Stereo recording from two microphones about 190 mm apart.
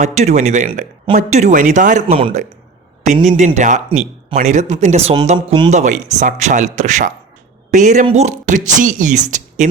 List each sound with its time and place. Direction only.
0.0 s speech: 35° right (ahead or behind)
3.2 s speech: 40° right (ahead or behind)